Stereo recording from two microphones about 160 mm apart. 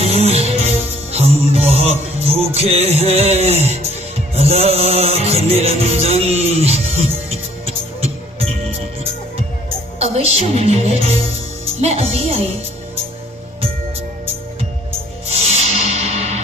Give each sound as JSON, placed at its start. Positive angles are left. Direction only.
{"t": 0.0, "sound": "music", "side_deg": -40}
{"t": 8.0, "sound": "music", "side_deg": -40}
{"t": 10.0, "sound": "a woman's voice", "side_deg": -40}
{"t": 15.3, "sound": "music", "side_deg": -40}